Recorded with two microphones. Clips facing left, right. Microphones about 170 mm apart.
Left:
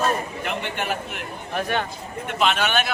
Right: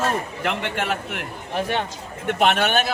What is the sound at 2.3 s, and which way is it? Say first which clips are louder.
Speech: right 3 dB; 60° right (ahead or behind).